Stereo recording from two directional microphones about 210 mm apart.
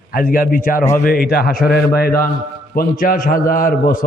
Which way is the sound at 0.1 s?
40° left (ahead or behind).